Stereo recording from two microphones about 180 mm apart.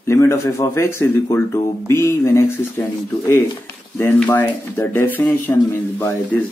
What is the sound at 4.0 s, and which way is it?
A man's voice, 10° left (ahead or behind).